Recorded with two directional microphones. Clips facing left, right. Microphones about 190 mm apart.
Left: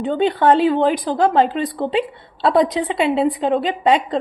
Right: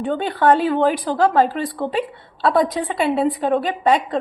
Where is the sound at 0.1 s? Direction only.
20° left (ahead or behind).